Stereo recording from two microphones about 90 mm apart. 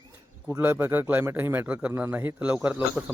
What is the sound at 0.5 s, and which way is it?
Speech, 25° right (ahead or behind).